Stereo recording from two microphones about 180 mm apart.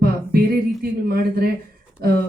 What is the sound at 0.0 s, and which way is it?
Speech, 55° right (ahead or behind).